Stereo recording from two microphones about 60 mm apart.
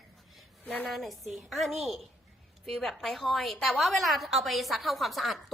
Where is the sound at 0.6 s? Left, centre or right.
Left.